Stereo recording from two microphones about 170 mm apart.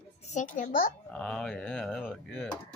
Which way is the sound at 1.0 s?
5° left (ahead or behind).